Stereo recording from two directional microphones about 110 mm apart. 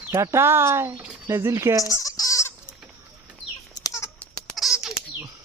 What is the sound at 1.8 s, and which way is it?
Goat, 30° left (ahead or behind).